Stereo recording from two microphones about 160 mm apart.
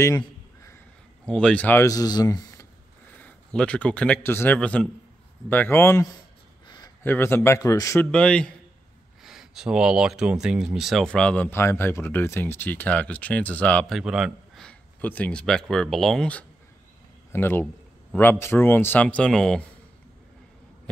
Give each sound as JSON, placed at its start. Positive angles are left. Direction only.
{"t": 0.0, "sound": "a sound", "side_deg": 20}
{"t": 1.2, "sound": "speech", "side_deg": 5}
{"t": 3.2, "sound": "a man's voice", "side_deg": 10}